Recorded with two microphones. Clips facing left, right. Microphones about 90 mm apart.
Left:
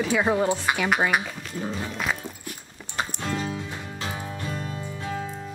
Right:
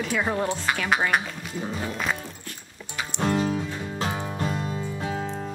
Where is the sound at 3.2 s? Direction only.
45° right (ahead or behind).